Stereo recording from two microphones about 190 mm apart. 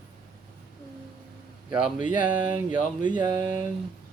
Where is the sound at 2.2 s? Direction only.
5° right (ahead or behind).